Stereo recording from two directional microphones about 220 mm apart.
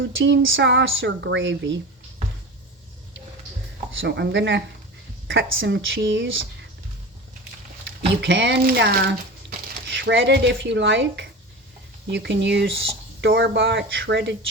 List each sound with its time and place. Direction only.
0.0 s speech: 55° right (ahead or behind)
3.9 s speech: 50° right (ahead or behind)
8.2 s speech: 50° right (ahead or behind)